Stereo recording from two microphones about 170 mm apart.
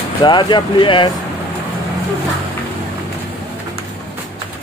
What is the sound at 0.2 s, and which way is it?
Speech, 25° left (ahead or behind).